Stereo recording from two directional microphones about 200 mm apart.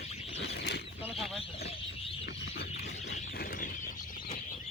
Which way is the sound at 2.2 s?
55° left (ahead or behind).